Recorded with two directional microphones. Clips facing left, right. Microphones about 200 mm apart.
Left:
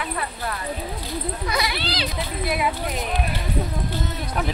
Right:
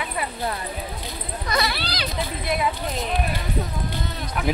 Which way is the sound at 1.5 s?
15° left (ahead or behind).